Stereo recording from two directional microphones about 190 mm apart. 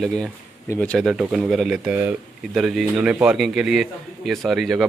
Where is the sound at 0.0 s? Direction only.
5° left (ahead or behind).